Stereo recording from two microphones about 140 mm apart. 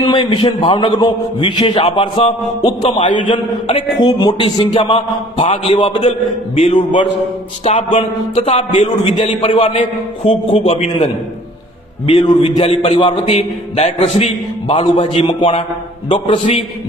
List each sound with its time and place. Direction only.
0.0 s a man's voice: 35° left (ahead or behind)
4.0 s a man's voice: 30° left (ahead or behind)
7.6 s a man's voice: 50° left (ahead or behind)
8.4 s a man's voice: 40° left (ahead or behind)
12.0 s a man's voice: 35° left (ahead or behind)